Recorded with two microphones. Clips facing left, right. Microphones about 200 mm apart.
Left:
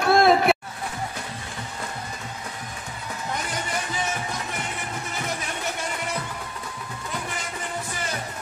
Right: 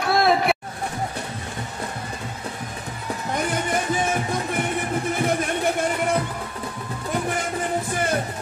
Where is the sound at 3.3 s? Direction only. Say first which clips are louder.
Right 7 dB; 50° right (ahead or behind).